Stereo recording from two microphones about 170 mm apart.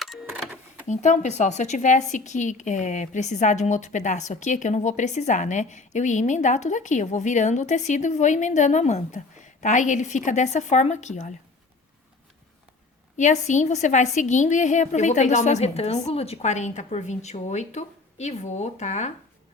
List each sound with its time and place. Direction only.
0.9 s speech: 45° left (ahead or behind)
13.1 s speech: 45° left (ahead or behind)